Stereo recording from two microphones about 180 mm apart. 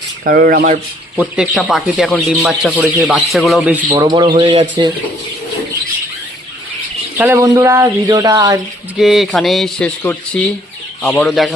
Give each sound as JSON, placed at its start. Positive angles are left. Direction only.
{"t": 0.3, "sound": "speech", "side_deg": -60}
{"t": 1.1, "sound": "speech", "side_deg": -5}
{"t": 3.9, "sound": "speech", "side_deg": -25}
{"t": 4.3, "sound": "speech", "side_deg": -35}
{"t": 7.2, "sound": "speech", "side_deg": -15}
{"t": 9.0, "sound": "speech", "side_deg": 0}